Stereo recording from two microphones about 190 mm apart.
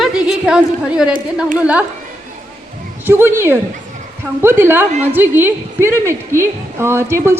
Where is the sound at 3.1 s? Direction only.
10° right (ahead or behind).